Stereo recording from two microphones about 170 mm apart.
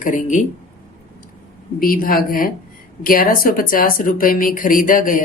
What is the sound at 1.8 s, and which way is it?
Speech, 55° left (ahead or behind).